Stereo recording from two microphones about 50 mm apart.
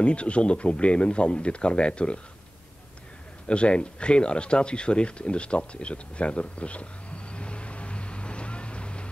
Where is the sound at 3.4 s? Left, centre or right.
Left.